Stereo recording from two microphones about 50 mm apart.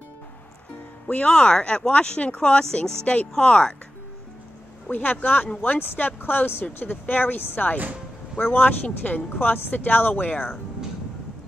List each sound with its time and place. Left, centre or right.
1.0 s speech: left
4.9 s speech: left
7.7 s speech: right
8.4 s speech: left